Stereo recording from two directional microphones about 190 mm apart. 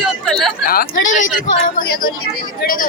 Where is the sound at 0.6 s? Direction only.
50° left (ahead or behind).